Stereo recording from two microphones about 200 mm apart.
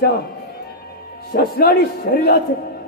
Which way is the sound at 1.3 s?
50° left (ahead or behind).